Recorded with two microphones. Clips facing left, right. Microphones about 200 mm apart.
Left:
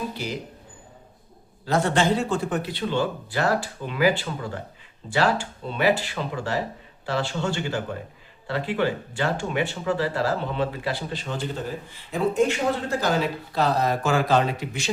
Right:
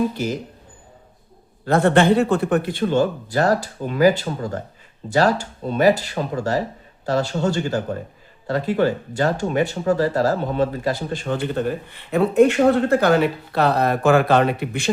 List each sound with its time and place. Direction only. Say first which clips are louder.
1.6 s a man's voice: right 6 dB; 55° right (ahead or behind)